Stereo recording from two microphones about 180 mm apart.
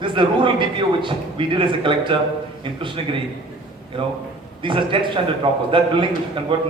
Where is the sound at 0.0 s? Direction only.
25° right (ahead or behind).